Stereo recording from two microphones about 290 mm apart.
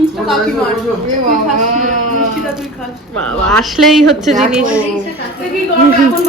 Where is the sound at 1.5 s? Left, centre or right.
Right.